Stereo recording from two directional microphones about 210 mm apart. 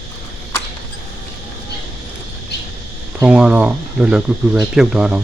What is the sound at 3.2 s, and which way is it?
Speech, 5° right (ahead or behind).